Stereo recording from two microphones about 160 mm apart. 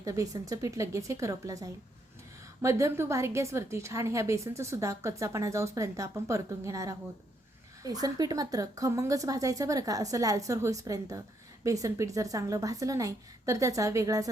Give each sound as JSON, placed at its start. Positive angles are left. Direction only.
{"t": 0.0, "sound": "a woman's voice", "side_deg": -20}